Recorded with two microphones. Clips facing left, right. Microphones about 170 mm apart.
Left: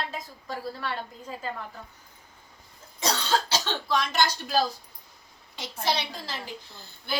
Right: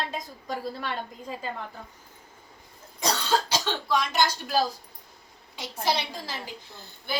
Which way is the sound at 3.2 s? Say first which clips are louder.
Right 1 dB; 15° right (ahead or behind).